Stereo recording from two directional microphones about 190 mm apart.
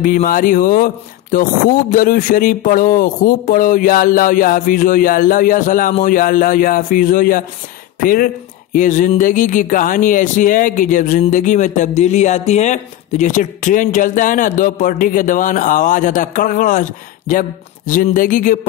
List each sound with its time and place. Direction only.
0.0 s speech: 45° left (ahead or behind)